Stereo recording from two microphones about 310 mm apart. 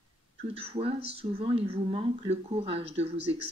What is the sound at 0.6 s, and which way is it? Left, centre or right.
Speech, centre.